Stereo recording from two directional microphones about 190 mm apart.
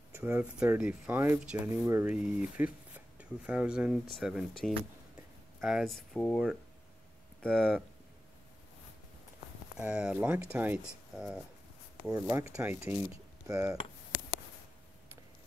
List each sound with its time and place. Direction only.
0.1 s speech: 10° right (ahead or behind)
9.8 s speech: 5° right (ahead or behind)